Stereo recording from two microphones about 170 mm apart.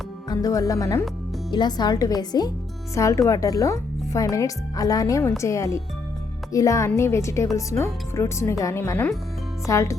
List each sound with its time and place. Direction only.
0.3 s speech: 20° left (ahead or behind)